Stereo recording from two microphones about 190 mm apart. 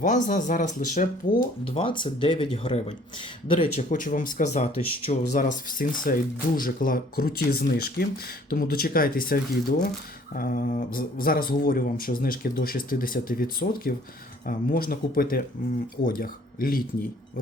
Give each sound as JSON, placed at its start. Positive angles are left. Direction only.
{"t": 0.0, "sound": "speech", "side_deg": 40}
{"t": 1.7, "sound": "speech", "side_deg": 25}
{"t": 5.4, "sound": "speech", "side_deg": 45}